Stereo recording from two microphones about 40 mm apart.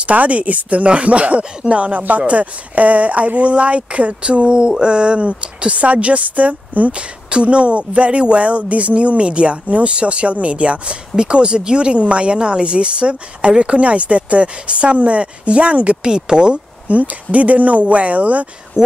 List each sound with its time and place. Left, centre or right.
0.0 s speech: right
2.0 s speech: right
6.9 s speech: right
16.0 s speech: right
16.9 s speech: right